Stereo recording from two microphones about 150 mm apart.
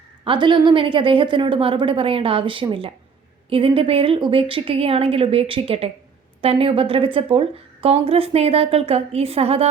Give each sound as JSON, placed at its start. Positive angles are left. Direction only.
{"t": 0.3, "sound": "a woman's voice", "side_deg": -30}